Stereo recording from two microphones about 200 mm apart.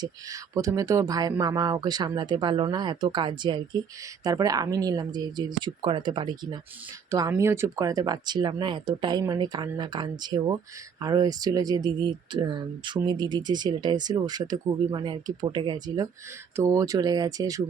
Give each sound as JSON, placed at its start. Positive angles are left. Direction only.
{"t": 0.0, "sound": "speech", "side_deg": -15}